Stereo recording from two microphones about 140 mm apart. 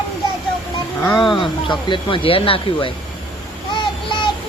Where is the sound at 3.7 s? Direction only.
35° left (ahead or behind).